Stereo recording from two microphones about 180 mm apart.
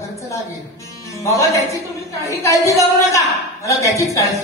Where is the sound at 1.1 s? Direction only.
15° left (ahead or behind).